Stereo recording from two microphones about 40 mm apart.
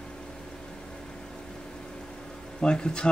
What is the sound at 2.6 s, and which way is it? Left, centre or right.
Speech, left.